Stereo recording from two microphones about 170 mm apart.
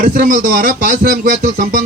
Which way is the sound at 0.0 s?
55° right (ahead or behind).